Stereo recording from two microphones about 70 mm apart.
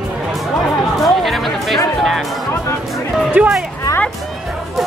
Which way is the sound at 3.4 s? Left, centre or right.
Centre.